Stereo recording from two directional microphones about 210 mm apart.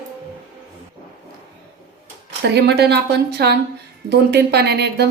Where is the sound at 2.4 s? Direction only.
50° right (ahead or behind).